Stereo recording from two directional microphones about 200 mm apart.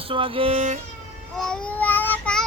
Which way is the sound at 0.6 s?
40° right (ahead or behind).